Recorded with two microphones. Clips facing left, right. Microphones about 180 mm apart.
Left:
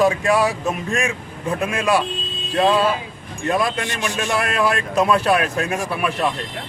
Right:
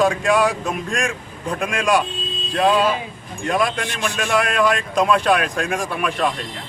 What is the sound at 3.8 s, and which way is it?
Speech, 15° left (ahead or behind).